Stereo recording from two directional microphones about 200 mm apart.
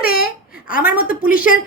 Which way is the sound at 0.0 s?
45° left (ahead or behind).